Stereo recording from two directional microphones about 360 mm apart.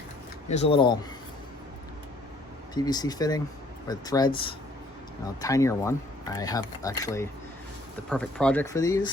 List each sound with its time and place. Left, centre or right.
0.4 s speech: centre
2.7 s speech: centre
5.4 s speech: centre